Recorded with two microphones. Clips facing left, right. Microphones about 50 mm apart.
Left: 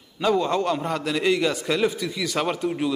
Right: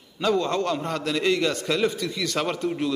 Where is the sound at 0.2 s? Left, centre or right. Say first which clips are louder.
Left 2 dB; centre.